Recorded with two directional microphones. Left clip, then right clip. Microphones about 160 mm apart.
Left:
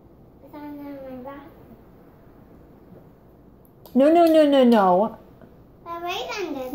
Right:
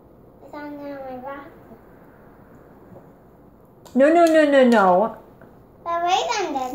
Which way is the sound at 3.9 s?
30° left (ahead or behind).